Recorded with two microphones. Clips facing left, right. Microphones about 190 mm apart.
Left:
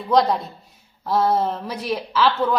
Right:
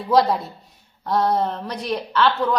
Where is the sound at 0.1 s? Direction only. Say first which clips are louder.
Even; centre (ahead or behind).